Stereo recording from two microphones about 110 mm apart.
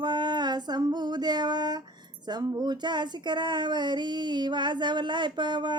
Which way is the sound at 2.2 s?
40° right (ahead or behind).